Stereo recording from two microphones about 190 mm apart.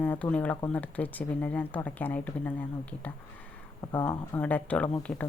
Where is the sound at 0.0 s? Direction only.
10° left (ahead or behind).